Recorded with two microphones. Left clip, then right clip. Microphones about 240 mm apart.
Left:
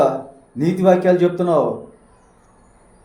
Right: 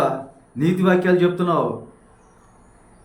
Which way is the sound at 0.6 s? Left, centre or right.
Centre.